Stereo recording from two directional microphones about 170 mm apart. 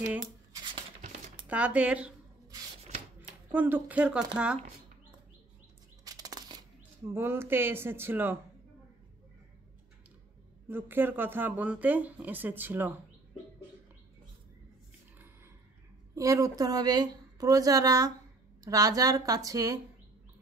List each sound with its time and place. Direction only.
0.0 s speech: 15° right (ahead or behind)
3.2 s speech: 10° right (ahead or behind)
6.0 s a sound: 20° right (ahead or behind)
7.2 s speech: 15° right (ahead or behind)
10.7 s speech: 10° right (ahead or behind)
16.2 s a woman's voice: 20° right (ahead or behind)